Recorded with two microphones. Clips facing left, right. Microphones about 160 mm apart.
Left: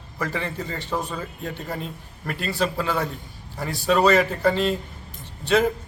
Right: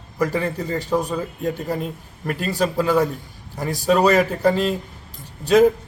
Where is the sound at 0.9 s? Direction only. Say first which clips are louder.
Right 6 dB; 10° right (ahead or behind).